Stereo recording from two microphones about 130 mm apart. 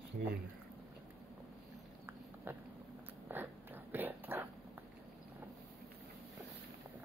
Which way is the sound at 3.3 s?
15° right (ahead or behind).